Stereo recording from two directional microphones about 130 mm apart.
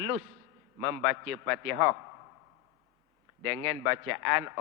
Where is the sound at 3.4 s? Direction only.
20° right (ahead or behind).